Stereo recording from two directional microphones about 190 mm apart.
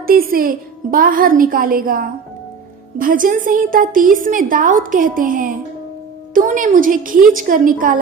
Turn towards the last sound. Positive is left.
turn(degrees=-45)  # may be behind; listen again after turning